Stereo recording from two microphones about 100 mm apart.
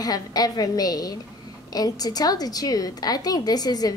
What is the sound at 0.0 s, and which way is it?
A woman's voice, 40° left (ahead or behind).